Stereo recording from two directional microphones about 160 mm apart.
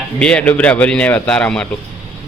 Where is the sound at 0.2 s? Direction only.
5° left (ahead or behind).